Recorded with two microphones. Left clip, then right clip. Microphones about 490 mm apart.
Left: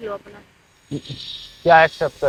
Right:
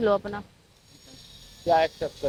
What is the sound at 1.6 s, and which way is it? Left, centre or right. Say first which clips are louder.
Speech: left 10 dB; left.